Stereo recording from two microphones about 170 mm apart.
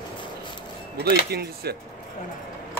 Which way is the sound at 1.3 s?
70° right (ahead or behind).